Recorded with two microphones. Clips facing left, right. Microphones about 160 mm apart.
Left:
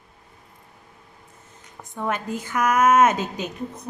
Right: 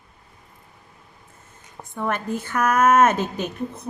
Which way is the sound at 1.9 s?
15° left (ahead or behind).